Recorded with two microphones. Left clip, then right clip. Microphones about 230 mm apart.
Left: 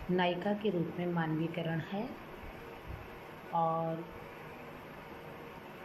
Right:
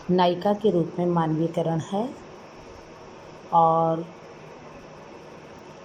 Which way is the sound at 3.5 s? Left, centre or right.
Right.